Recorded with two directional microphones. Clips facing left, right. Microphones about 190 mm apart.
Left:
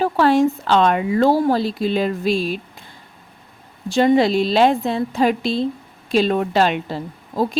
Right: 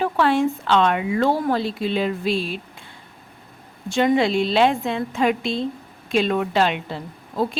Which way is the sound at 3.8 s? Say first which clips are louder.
Left 4 dB; 35° left (ahead or behind).